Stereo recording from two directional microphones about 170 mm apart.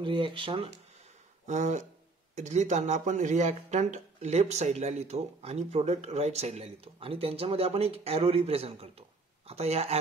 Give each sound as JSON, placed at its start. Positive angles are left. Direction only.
{"t": 0.0, "sound": "speech", "side_deg": -30}
{"t": 1.5, "sound": "speech", "side_deg": -45}